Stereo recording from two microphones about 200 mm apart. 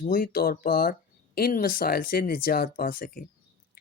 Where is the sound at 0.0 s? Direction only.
45° left (ahead or behind).